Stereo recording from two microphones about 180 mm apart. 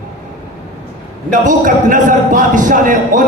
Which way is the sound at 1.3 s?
45° right (ahead or behind).